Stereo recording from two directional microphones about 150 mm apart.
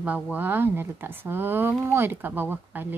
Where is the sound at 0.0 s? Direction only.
10° right (ahead or behind).